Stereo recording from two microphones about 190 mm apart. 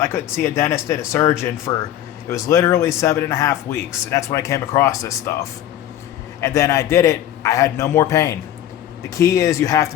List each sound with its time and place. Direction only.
0.0 s a man's voice: 15° left (ahead or behind)